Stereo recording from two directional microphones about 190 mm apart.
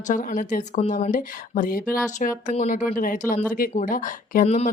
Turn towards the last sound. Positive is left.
turn(degrees=35)  # may be behind; listen again after turning